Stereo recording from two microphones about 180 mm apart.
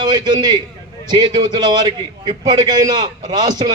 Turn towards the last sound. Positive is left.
turn(degrees=-20)  # may be behind; listen again after turning